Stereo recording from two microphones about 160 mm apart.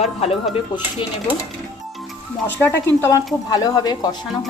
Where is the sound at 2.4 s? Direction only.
15° left (ahead or behind).